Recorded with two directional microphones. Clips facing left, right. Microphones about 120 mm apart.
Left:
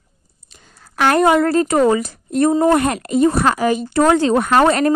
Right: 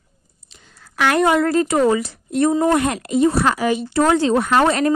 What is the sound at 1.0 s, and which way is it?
A woman's voice, 45° left (ahead or behind).